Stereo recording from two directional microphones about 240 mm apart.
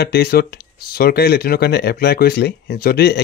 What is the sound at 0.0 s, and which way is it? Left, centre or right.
Speech, left.